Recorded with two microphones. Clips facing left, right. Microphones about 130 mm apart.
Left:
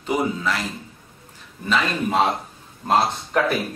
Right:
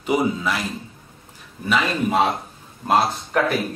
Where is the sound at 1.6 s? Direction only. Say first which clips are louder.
Right 1 dB; 10° right (ahead or behind).